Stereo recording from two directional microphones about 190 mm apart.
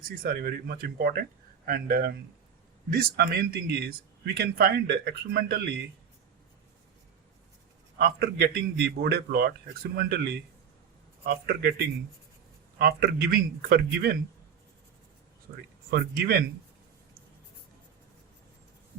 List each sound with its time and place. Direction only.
0.2 s speech: 50° right (ahead or behind)
7.9 s speech: 50° right (ahead or behind)
15.9 s speech: 55° right (ahead or behind)